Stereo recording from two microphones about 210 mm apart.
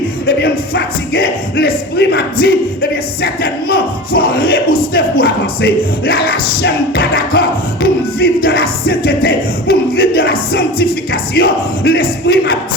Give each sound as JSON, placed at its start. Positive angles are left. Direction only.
{"t": 0.3, "sound": "speech", "side_deg": 45}
{"t": 3.2, "sound": "music", "side_deg": 45}
{"t": 11.9, "sound": "speech", "side_deg": 45}